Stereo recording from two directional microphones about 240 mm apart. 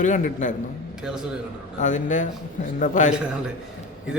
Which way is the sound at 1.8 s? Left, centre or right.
Left.